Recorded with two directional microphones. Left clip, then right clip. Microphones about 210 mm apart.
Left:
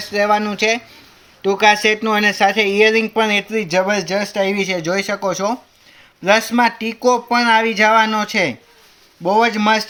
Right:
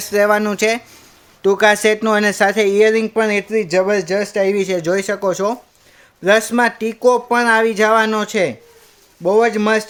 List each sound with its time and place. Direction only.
0.1 s speech: 45° right (ahead or behind); by 9.8 s 25° right (ahead or behind)